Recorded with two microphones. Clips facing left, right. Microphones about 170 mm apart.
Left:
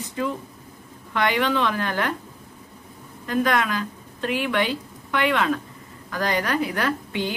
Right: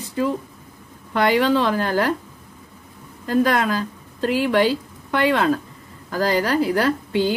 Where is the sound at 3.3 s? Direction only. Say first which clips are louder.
Right 4 dB; 35° right (ahead or behind).